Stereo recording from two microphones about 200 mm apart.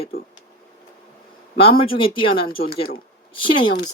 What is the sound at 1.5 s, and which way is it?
Speech, 25° left (ahead or behind).